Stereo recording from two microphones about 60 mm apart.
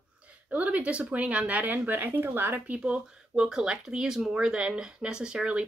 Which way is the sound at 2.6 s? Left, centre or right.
Centre.